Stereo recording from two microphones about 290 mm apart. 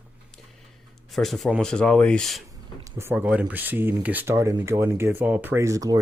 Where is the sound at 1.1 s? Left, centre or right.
Centre.